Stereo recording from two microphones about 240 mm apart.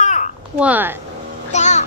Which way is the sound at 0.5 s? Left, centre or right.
Centre.